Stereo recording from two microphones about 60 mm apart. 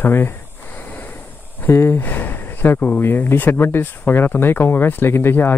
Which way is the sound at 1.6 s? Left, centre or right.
Left.